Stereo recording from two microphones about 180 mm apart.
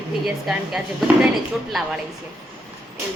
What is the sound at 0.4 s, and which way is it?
Speech, 5° right (ahead or behind).